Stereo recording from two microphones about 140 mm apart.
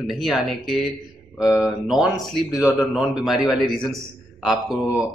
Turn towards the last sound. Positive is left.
turn(degrees=-5)  # may be behind; listen again after turning